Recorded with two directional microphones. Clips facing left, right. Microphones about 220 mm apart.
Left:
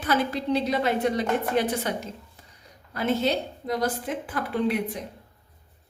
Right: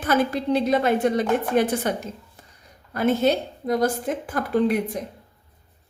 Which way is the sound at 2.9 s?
50° right (ahead or behind).